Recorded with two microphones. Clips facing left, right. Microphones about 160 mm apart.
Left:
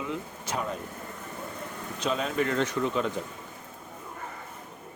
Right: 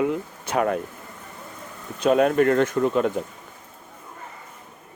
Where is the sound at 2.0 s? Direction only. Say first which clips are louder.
Right 10 dB; 55° right (ahead or behind).